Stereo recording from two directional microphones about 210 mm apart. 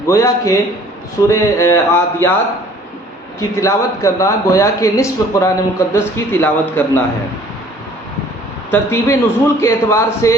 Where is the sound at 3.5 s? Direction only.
15° left (ahead or behind).